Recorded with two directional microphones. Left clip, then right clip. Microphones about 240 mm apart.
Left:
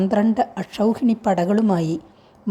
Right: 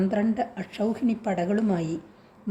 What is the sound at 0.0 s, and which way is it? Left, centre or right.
A woman's voice, centre.